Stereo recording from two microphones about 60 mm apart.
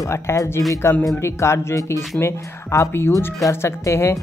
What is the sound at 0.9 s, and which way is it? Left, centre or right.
Speech, left.